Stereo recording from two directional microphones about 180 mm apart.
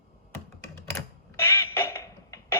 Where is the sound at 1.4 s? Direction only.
15° left (ahead or behind).